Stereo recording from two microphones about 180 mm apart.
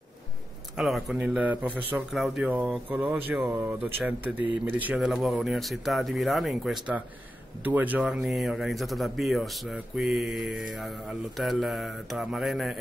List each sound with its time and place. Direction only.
0.7 s speech: centre (ahead or behind)